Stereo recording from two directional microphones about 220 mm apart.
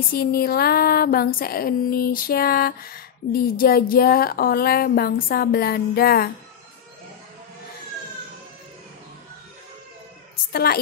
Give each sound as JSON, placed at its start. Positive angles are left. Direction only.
{"t": 0.1, "sound": "speech", "side_deg": 45}
{"t": 10.5, "sound": "speech", "side_deg": 45}